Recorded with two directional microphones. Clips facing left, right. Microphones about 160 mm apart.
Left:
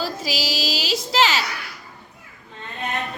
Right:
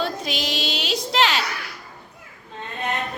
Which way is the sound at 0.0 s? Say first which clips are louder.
Even; 5° left (ahead or behind).